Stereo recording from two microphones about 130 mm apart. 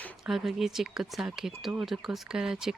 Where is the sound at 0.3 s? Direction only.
Centre (ahead or behind).